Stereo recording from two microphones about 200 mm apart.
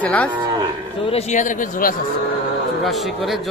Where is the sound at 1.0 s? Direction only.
35° left (ahead or behind).